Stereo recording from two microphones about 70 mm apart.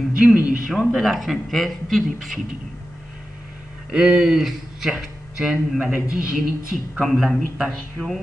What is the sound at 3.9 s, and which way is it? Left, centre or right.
Speech, centre.